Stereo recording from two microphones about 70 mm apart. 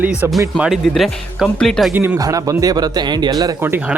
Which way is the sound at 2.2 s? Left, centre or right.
Right.